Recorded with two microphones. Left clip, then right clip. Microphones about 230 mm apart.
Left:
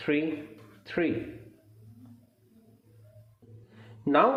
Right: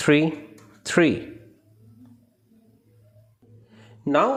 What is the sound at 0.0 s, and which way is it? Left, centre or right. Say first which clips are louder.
A man's voice: right 9 dB; right.